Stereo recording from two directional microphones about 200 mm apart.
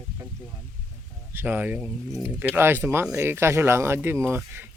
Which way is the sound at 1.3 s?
10° right (ahead or behind).